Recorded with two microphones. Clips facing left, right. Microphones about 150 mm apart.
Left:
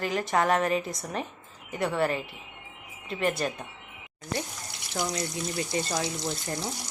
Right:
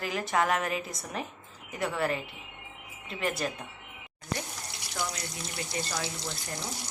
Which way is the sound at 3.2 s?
Centre (ahead or behind).